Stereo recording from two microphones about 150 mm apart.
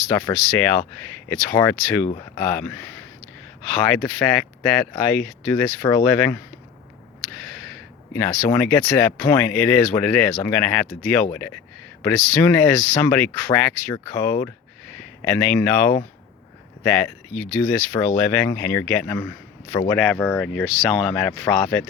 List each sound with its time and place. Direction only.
0.1 s speech: 15° left (ahead or behind)
7.3 s a sound: 5° left (ahead or behind)
8.1 s speech: 10° left (ahead or behind)